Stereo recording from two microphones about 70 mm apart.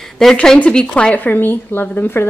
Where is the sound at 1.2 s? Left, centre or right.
Left.